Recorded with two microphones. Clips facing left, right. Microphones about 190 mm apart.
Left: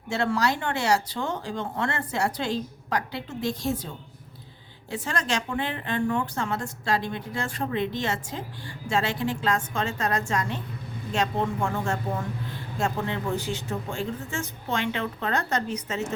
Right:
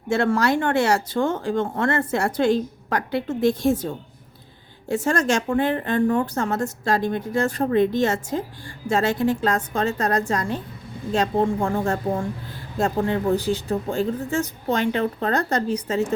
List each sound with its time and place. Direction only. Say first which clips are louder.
0.1 s a woman's voice: right 5 dB; 50° right (ahead or behind); by 16.1 s 30° right (ahead or behind)